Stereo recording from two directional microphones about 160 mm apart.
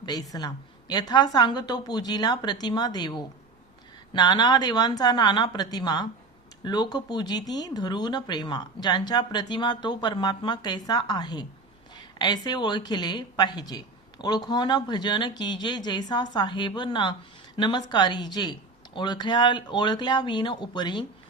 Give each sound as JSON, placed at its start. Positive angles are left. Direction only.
{"t": 0.0, "sound": "a woman's voice", "side_deg": 25}